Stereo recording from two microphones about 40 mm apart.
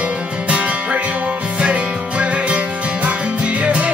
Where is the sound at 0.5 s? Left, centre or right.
Right.